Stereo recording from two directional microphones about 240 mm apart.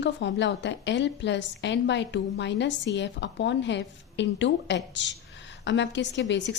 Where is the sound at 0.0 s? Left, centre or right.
Left.